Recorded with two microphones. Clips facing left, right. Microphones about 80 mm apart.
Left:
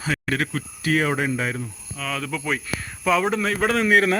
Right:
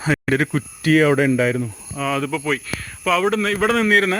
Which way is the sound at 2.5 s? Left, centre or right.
Centre.